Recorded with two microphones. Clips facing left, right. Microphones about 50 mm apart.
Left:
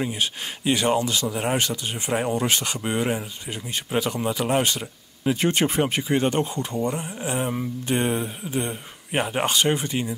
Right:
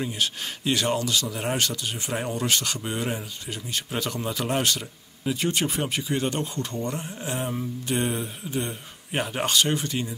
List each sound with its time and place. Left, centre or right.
0.0 s speech: centre
5.3 s speech: left; by 7.5 s centre
7.5 s speech: left